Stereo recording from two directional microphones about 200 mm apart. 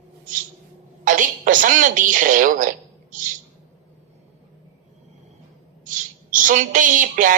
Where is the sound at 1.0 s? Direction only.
40° right (ahead or behind).